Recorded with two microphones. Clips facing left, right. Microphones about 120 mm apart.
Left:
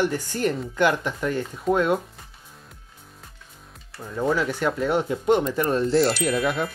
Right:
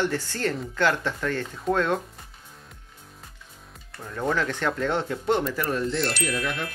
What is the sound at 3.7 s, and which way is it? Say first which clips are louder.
Speech: left 2 dB; 5° left (ahead or behind).